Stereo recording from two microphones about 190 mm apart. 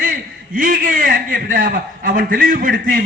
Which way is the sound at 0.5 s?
45° right (ahead or behind).